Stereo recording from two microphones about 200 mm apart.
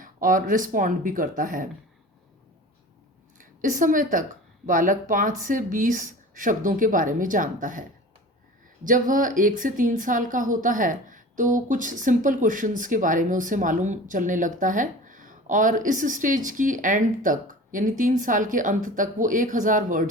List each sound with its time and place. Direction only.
0.0 s a woman's voice: 40° right (ahead or behind)
3.3 s a woman's voice: 40° right (ahead or behind)